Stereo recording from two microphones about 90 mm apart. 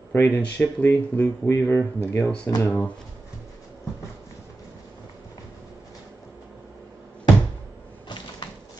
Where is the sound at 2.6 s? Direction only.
25° left (ahead or behind).